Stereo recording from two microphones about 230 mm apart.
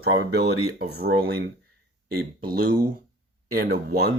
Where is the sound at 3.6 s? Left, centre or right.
Right.